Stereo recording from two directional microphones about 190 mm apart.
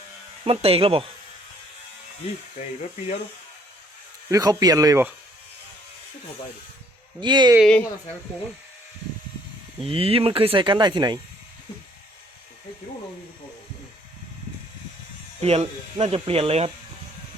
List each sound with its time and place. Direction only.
0.4 s speech: 30° right (ahead or behind)
4.3 s speech: 20° right (ahead or behind)
7.2 s speech: 25° right (ahead or behind)
7.6 s speech: 5° left (ahead or behind)
9.8 s speech: 30° right (ahead or behind)
15.4 s speech: 35° right (ahead or behind)